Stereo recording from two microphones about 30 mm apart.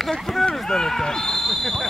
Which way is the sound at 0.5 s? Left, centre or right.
Centre.